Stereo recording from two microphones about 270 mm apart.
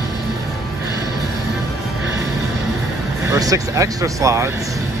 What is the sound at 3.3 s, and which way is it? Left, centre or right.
Speech, centre.